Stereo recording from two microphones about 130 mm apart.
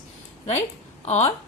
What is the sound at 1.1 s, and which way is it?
Speech, 55° left (ahead or behind).